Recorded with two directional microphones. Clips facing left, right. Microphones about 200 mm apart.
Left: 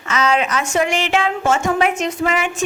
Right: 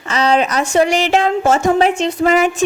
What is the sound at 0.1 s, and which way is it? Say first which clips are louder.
A woman's voice: right 3 dB; 35° right (ahead or behind).